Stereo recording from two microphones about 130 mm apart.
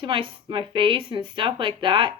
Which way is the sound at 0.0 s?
40° right (ahead or behind).